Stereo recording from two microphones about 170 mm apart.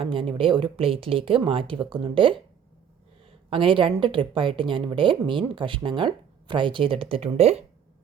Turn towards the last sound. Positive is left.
turn(degrees=-35)  # may be behind; listen again after turning